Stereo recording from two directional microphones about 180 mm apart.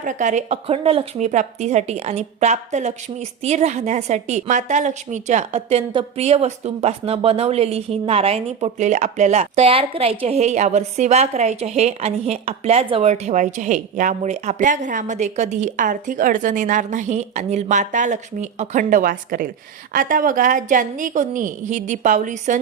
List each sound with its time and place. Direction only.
0.0 s a woman's voice: 45° right (ahead or behind)